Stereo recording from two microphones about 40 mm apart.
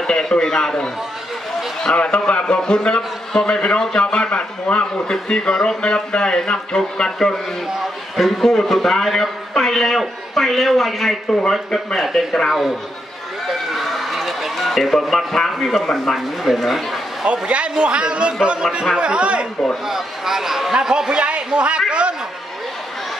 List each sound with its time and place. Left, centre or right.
0.0 s a sound: centre
2.0 s a man's voice: left
5.5 s speech: centre
5.8 s a man's voice: left; by 12.0 s centre
12.0 s a man's voice: centre
13.7 s a man's voice: centre
17.3 s a man's voice: right
19.9 s a man's voice: centre